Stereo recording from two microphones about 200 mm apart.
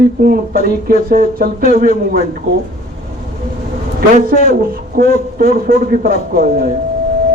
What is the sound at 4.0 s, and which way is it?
A man's voice, 45° right (ahead or behind).